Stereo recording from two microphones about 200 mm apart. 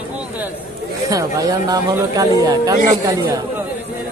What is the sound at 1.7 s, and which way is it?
Speech, 20° right (ahead or behind).